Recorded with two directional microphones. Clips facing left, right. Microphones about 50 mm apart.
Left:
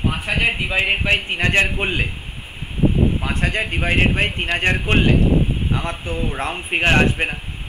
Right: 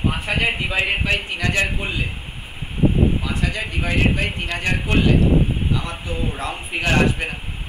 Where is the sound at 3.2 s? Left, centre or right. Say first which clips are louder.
Left 3 dB; left.